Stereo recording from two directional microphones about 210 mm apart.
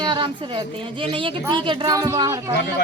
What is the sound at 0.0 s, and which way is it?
A woman's voice, 20° right (ahead or behind).